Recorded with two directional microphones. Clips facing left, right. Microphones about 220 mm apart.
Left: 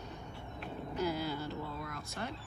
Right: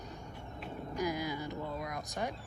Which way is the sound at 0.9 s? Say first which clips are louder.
Even; 15° right (ahead or behind).